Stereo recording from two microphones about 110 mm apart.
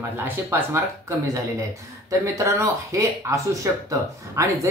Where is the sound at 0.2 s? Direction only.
20° right (ahead or behind).